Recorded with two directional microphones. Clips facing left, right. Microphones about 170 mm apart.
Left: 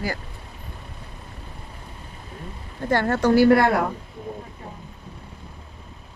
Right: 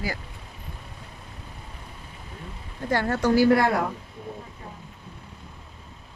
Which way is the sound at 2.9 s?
55° left (ahead or behind).